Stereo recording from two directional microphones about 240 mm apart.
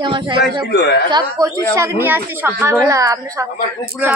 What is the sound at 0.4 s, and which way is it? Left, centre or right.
Speech, left.